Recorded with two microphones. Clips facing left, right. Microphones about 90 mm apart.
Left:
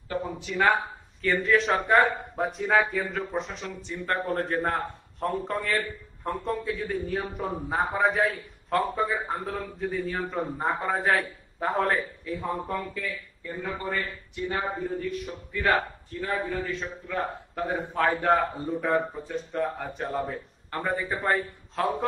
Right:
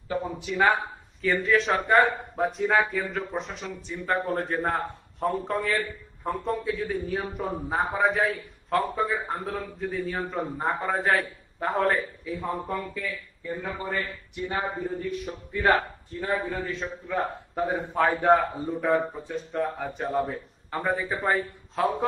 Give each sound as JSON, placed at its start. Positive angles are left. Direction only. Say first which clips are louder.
{"t": 0.1, "sound": "speech", "louder": "right 1 dB", "side_deg": -5}
{"t": 15.0, "sound": "speech", "louder": "even", "side_deg": -25}
{"t": 17.1, "sound": "speech", "louder": "right 2 dB", "side_deg": 0}